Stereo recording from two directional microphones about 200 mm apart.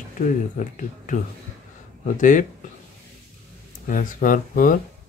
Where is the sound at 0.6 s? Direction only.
40° left (ahead or behind).